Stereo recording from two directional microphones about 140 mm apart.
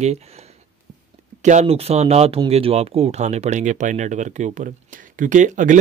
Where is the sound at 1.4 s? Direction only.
55° right (ahead or behind).